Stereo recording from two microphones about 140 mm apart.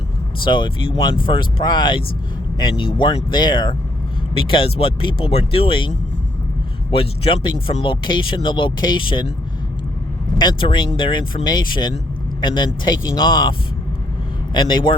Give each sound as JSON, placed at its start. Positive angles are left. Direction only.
{"t": 0.4, "sound": "speech", "side_deg": 35}
{"t": 6.9, "sound": "speech", "side_deg": 40}
{"t": 10.3, "sound": "speech", "side_deg": 35}